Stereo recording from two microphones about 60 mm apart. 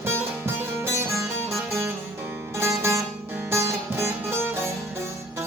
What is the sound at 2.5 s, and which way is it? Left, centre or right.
Music, right.